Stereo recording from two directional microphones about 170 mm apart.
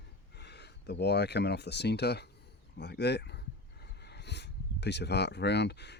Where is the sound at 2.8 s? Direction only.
80° left.